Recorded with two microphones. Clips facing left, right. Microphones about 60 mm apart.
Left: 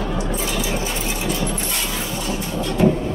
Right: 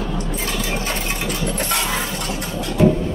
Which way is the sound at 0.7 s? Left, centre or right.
Right.